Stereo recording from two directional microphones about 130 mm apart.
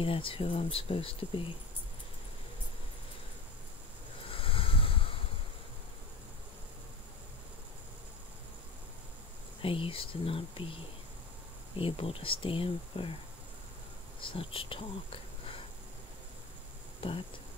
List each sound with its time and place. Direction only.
0.0 s speech: 45° left (ahead or behind)
4.3 s a sound: 45° left (ahead or behind)
9.6 s speech: 45° left (ahead or behind)
14.2 s speech: 45° left (ahead or behind)